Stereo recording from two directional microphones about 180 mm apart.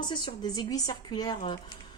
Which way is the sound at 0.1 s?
25° left (ahead or behind).